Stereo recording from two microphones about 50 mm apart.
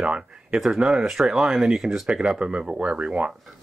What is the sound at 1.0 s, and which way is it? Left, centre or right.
Speech, centre.